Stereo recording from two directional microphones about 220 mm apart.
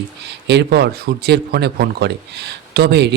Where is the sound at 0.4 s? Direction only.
50° right (ahead or behind).